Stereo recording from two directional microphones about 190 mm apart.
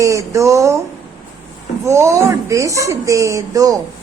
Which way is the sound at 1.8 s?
15° right (ahead or behind).